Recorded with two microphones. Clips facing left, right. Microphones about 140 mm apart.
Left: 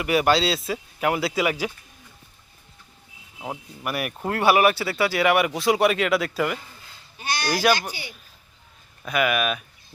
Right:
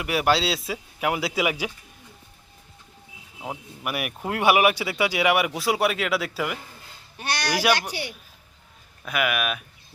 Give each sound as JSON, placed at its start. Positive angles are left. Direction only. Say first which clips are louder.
{"t": 0.0, "sound": "speech", "louder": "left 2 dB", "side_deg": 0}
{"t": 3.8, "sound": "speech", "louder": "left 2 dB", "side_deg": -10}
{"t": 7.2, "sound": "speech", "louder": "even", "side_deg": -70}
{"t": 9.0, "sound": "speech", "louder": "left 3 dB", "side_deg": -5}